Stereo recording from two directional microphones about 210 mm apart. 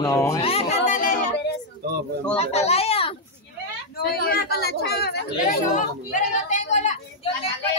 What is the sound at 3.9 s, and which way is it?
Speech, 45° left (ahead or behind).